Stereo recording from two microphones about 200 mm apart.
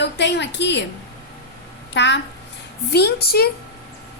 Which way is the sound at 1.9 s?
65° left (ahead or behind).